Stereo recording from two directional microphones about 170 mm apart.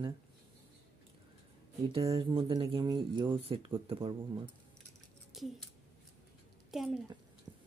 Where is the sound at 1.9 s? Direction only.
35° right (ahead or behind).